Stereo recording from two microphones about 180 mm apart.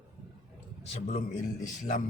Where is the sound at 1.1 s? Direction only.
45° left (ahead or behind).